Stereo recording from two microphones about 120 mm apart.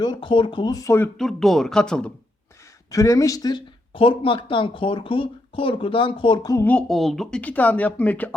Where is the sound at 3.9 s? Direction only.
45° left (ahead or behind).